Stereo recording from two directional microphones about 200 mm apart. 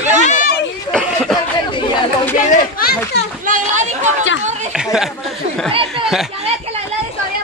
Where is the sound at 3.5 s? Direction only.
40° right (ahead or behind).